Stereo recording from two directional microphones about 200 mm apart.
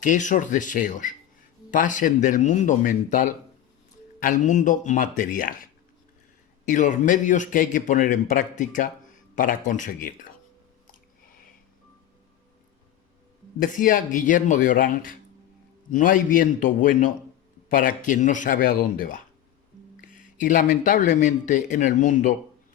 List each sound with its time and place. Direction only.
0.0 s speech: 40° left (ahead or behind)
6.7 s speech: 40° left (ahead or behind)
13.6 s speech: 40° left (ahead or behind)